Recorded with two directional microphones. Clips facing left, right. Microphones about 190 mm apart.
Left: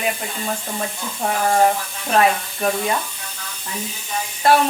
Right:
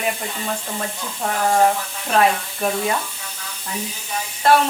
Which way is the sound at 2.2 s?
Centre (ahead or behind).